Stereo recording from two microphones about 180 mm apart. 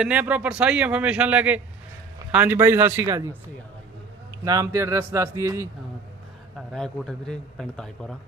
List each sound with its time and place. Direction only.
0.0 s a man's voice: 5° right (ahead or behind)
4.4 s a man's voice: 20° right (ahead or behind)
6.6 s a man's voice: centre (ahead or behind)